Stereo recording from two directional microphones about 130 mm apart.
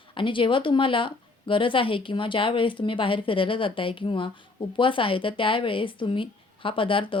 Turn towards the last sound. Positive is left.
turn(degrees=40)  # may be behind; listen again after turning